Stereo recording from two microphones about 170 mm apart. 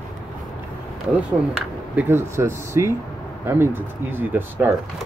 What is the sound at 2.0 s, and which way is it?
Speech, 15° right (ahead or behind).